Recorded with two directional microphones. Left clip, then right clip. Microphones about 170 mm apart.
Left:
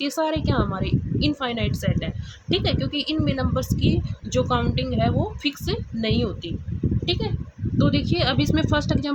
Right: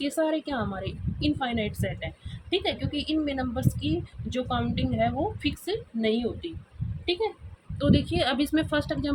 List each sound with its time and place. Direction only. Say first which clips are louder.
0.0 s a woman's voice: left 3 dB; 40° left (ahead or behind)
7.8 s speech: left 2 dB; 25° left (ahead or behind)